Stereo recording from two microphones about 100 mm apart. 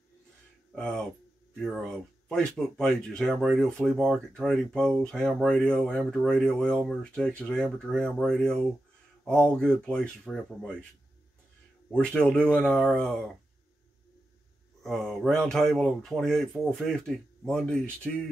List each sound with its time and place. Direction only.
0.7 s speech: 10° left (ahead or behind)
11.9 s speech: 10° left (ahead or behind)
14.8 s speech: 5° left (ahead or behind)